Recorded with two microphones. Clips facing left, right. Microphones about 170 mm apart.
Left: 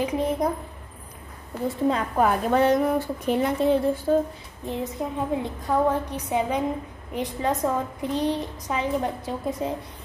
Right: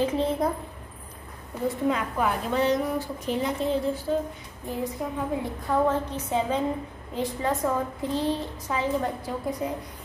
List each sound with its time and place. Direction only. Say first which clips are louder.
0.0 s a woman's voice: even; 15° left (ahead or behind)
1.9 s a woman's voice: left 6 dB; 40° left (ahead or behind); by 4.2 s 55° left (ahead or behind)
4.6 s a woman's voice: left 1 dB; 20° left (ahead or behind)